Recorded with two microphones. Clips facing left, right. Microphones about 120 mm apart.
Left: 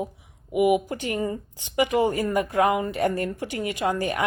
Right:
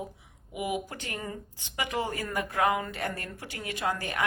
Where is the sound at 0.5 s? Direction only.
70° left (ahead or behind).